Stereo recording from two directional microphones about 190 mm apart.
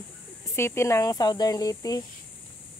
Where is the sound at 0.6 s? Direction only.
15° left (ahead or behind).